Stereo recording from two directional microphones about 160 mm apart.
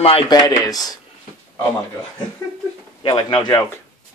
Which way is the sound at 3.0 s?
30° left (ahead or behind).